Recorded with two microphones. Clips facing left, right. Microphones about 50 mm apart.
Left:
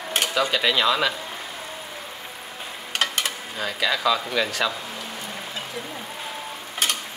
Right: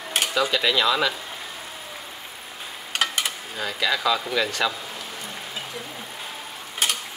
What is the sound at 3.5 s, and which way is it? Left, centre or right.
Speech, centre.